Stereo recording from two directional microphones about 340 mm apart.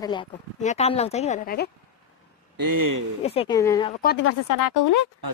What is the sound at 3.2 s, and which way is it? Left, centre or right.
Speech, centre.